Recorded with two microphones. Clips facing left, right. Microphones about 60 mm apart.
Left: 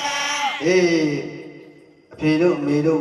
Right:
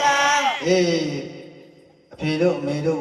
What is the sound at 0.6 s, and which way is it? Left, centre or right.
Speech, left.